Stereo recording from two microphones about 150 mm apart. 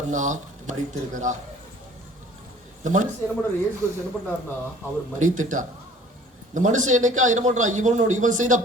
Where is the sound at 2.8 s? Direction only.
55° right (ahead or behind).